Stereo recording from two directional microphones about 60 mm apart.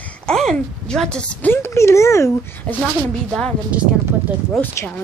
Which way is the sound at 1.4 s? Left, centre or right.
Left.